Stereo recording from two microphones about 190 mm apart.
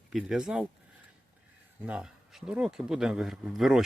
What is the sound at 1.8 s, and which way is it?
Speech, 5° right (ahead or behind).